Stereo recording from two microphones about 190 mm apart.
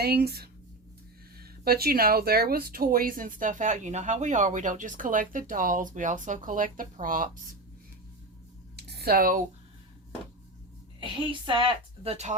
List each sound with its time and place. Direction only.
0.0 s speech: 55° right (ahead or behind)
8.7 s a sound: 55° right (ahead or behind)
11.0 s a woman's voice: 25° right (ahead or behind)